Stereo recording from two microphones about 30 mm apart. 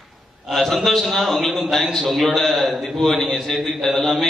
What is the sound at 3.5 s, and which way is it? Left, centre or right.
Speech, centre.